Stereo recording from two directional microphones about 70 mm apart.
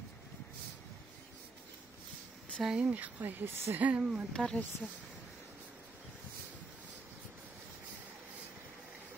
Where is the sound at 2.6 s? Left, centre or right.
Centre.